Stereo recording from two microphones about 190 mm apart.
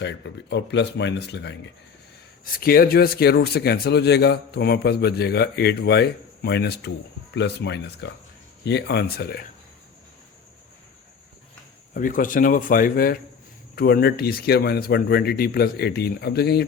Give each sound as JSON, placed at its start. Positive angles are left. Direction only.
{"t": 0.0, "sound": "speech", "side_deg": 65}
{"t": 2.4, "sound": "speech", "side_deg": 50}
{"t": 11.9, "sound": "speech", "side_deg": 45}